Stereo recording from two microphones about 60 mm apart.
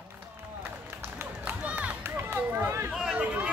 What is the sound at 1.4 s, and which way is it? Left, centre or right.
Run, right.